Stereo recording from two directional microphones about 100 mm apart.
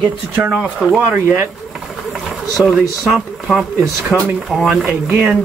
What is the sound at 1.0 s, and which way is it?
Speech, 20° right (ahead or behind).